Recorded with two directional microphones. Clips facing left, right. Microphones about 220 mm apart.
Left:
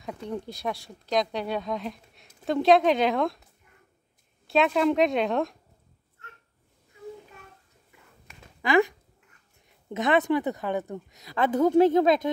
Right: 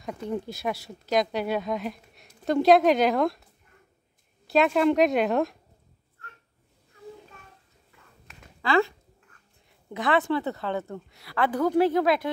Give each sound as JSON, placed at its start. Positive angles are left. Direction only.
{"t": 0.0, "sound": "speech", "side_deg": 0}
{"t": 4.5, "sound": "speech", "side_deg": 0}
{"t": 8.6, "sound": "a woman's voice", "side_deg": 15}